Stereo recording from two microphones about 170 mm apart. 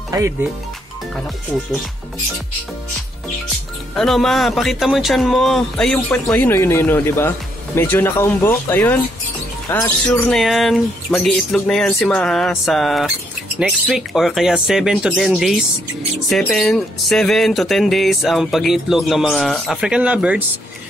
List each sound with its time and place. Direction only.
0.1 s speech: 15° right (ahead or behind)
3.9 s speech: centre (ahead or behind)